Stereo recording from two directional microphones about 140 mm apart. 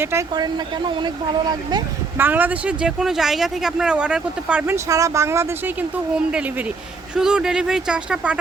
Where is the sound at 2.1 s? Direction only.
15° right (ahead or behind).